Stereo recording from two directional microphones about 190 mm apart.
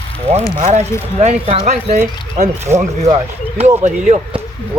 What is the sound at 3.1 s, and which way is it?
Speech, 35° right (ahead or behind).